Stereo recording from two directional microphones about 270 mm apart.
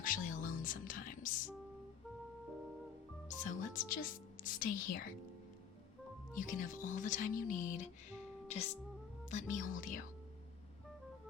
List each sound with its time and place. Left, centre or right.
0.0 s speech: left
3.2 s a woman's voice: left
6.3 s speech: left